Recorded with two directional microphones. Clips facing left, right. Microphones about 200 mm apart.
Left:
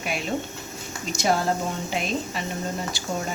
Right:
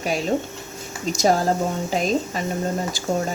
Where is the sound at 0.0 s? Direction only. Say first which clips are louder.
Right 5 dB; 40° right (ahead or behind).